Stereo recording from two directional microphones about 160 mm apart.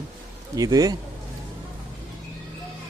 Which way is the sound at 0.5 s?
20° right (ahead or behind).